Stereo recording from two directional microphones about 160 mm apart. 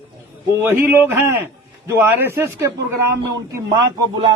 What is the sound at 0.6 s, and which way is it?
A man's voice, 15° right (ahead or behind).